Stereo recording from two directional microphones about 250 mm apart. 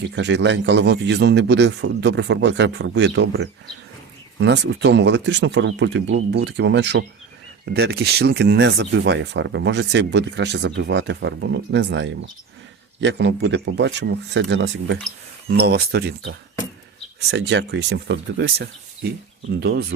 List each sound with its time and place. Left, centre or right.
0.2 s speech: right
17.2 s speech: right